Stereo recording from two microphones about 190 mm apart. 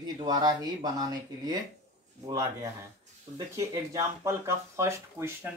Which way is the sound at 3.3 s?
25° right (ahead or behind).